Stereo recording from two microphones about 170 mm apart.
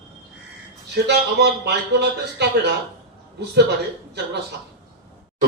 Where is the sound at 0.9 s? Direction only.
75° right (ahead or behind).